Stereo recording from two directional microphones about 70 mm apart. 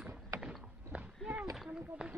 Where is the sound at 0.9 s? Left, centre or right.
Centre.